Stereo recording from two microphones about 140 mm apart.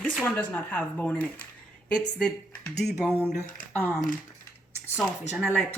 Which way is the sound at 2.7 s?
5° left (ahead or behind).